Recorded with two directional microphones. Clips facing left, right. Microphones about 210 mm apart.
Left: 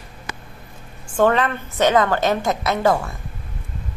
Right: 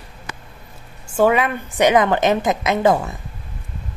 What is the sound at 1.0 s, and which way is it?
A woman's voice, 10° right (ahead or behind).